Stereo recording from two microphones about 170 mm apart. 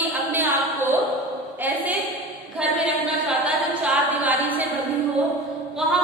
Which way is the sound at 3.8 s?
10° right (ahead or behind).